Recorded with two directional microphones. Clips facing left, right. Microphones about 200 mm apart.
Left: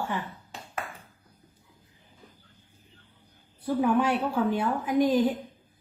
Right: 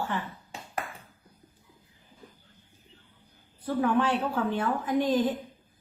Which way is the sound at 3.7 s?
10° left (ahead or behind).